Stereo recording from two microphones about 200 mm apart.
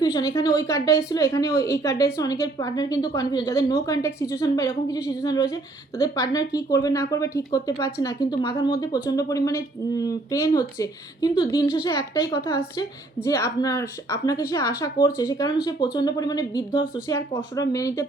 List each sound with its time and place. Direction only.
0.0 s a woman's voice: 20° left (ahead or behind)